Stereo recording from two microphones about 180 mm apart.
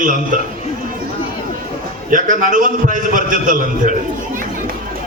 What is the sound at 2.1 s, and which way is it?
A man's voice, 50° right (ahead or behind).